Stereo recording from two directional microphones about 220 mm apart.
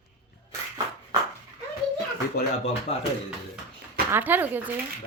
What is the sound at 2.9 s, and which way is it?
Speech, 25° left (ahead or behind).